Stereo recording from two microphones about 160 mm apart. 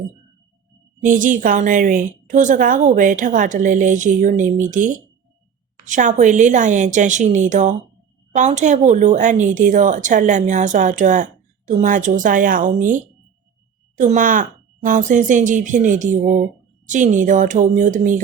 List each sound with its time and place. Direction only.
1.0 s speech: 55° right (ahead or behind)